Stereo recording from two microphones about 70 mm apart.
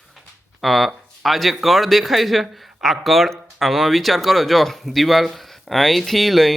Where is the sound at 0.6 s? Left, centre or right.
Centre.